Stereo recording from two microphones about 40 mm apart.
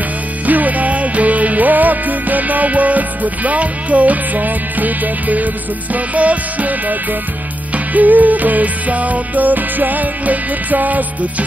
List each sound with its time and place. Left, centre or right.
0.5 s music: right